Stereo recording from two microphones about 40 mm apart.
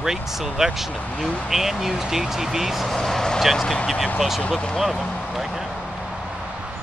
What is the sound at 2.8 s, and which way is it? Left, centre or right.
Vehicle, centre.